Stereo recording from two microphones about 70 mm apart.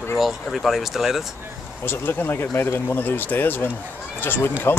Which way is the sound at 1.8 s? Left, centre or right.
Left.